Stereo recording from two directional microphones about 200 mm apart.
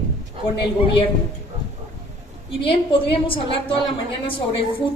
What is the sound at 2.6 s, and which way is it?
A woman's voice, 25° left (ahead or behind).